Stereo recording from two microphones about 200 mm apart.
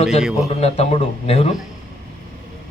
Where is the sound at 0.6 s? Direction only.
30° left (ahead or behind).